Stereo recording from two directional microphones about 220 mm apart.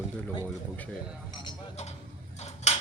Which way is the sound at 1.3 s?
20° left (ahead or behind).